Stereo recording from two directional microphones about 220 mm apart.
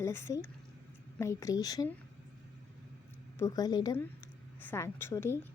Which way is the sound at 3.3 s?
15° left (ahead or behind).